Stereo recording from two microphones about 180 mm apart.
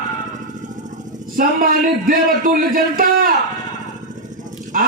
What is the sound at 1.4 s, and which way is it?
A man's voice, 50° right (ahead or behind).